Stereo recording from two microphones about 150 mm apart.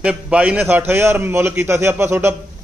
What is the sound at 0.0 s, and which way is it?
A man's voice, 5° right (ahead or behind).